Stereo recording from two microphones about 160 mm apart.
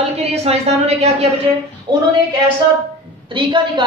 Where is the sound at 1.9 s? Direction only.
30° right (ahead or behind).